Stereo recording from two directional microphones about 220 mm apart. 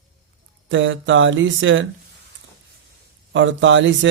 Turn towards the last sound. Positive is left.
turn(degrees=-60)  # may be behind; listen again after turning